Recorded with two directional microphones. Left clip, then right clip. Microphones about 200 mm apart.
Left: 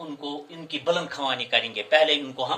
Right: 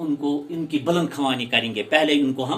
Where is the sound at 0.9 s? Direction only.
20° left (ahead or behind).